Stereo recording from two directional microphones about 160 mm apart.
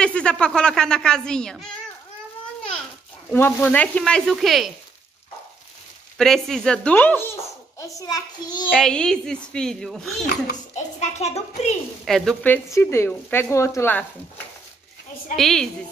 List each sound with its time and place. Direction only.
0.0 s a woman's voice: 5° left (ahead or behind)
3.3 s a woman's voice: 10° left (ahead or behind)
6.1 s a woman's voice: centre (ahead or behind)
7.8 s a child's voice: 20° left (ahead or behind)
8.6 s a woman's voice: 5° left (ahead or behind)
11.0 s a child's voice: 45° left (ahead or behind)
12.0 s a woman's voice: centre (ahead or behind)
12.4 s speech: 15° left (ahead or behind)
15.3 s a woman's voice: centre (ahead or behind)